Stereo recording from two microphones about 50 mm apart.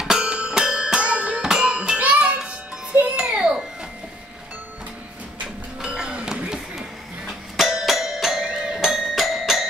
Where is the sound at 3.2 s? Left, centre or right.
Centre.